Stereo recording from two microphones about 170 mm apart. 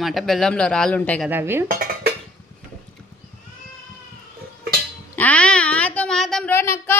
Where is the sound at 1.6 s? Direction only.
60° right (ahead or behind).